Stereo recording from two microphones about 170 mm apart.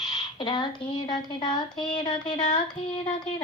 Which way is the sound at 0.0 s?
25° left (ahead or behind).